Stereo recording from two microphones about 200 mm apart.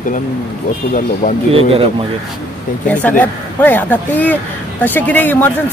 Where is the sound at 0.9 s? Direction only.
40° left (ahead or behind).